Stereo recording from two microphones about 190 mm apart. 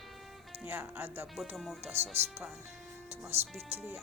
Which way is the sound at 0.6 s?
10° right (ahead or behind).